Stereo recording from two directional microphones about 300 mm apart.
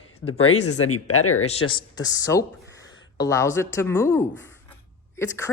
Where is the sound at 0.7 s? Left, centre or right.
Left.